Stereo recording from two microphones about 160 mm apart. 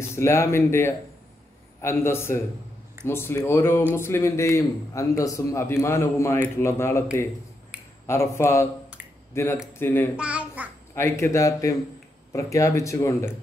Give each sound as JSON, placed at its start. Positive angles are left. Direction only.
{"t": 0.1, "sound": "a man's voice", "side_deg": 15}
{"t": 7.7, "sound": "a sound", "side_deg": -5}
{"t": 8.1, "sound": "a man's voice", "side_deg": 15}
{"t": 10.1, "sound": "a child's voice", "side_deg": -5}
{"t": 11.0, "sound": "a man's voice", "side_deg": 15}